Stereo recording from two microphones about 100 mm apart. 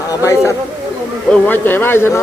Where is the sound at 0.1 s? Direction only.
35° left (ahead or behind).